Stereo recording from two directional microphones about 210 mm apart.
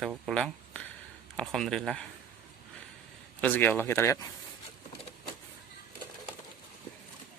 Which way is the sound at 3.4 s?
10° left (ahead or behind).